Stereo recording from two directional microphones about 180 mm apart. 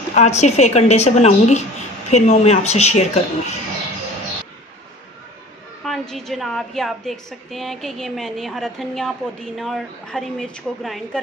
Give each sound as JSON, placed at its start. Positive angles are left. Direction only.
{"t": 0.1, "sound": "a woman's voice", "side_deg": 40}
{"t": 5.9, "sound": "a woman's voice", "side_deg": 0}